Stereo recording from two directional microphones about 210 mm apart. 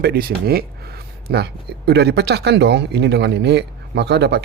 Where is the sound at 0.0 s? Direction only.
45° right (ahead or behind).